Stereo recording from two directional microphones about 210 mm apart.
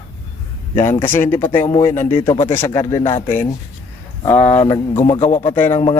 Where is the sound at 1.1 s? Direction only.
10° left (ahead or behind).